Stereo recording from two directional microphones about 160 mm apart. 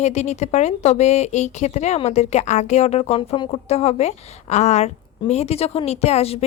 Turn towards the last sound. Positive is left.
turn(degrees=40)  # may be behind; listen again after turning